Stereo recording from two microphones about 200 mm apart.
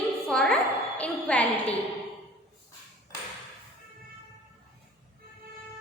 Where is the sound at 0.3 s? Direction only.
5° left (ahead or behind).